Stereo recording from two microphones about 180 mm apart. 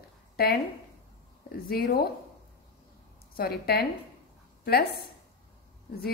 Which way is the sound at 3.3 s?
60° left (ahead or behind).